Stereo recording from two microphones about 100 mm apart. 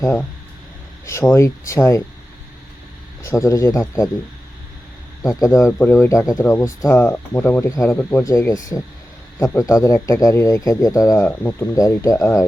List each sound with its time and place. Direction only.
1.0 s speech: 30° left (ahead or behind)
3.2 s speech: 30° left (ahead or behind)
5.2 s speech: 30° left (ahead or behind)
11.3 s speech: 20° left (ahead or behind)
11.7 s speech: 35° left (ahead or behind)